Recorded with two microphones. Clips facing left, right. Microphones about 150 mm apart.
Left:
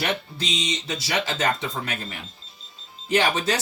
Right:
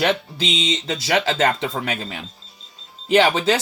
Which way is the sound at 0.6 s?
90° right.